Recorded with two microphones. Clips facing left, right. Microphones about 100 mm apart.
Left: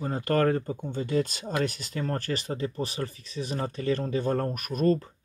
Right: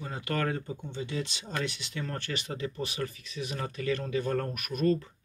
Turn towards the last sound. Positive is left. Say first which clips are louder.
# left 3 dB
turn(degrees=40)  # may be behind; listen again after turning